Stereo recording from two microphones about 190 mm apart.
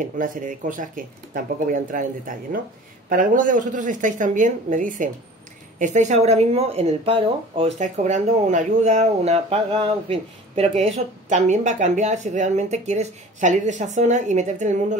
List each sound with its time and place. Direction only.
0.0 s speech: 45° right (ahead or behind)